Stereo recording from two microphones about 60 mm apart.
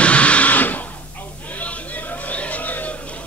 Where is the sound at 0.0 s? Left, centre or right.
Centre.